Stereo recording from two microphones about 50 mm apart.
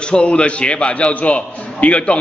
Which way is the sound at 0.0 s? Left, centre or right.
Centre.